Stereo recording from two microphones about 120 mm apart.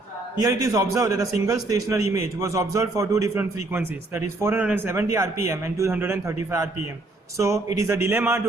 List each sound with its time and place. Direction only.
0.3 s a man's voice: 30° right (ahead or behind)